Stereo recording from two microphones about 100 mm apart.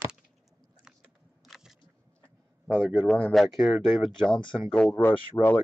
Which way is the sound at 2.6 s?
15° right (ahead or behind).